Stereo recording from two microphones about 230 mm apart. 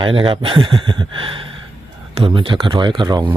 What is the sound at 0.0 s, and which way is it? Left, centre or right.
Speech, right.